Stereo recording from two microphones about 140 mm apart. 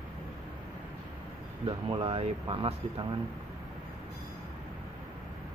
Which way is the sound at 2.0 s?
45° right (ahead or behind).